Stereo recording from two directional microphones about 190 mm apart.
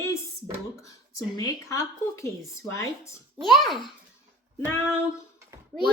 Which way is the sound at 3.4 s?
Centre (ahead or behind).